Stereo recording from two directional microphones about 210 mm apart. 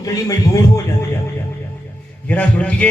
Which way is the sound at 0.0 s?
15° left (ahead or behind).